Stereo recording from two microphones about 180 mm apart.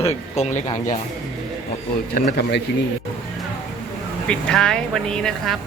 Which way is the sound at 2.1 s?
55° left (ahead or behind).